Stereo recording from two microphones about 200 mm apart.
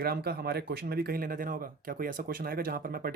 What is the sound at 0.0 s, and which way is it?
Speech, 50° right (ahead or behind).